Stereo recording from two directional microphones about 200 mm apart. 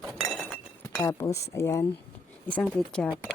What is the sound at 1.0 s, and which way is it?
Speech, 15° left (ahead or behind).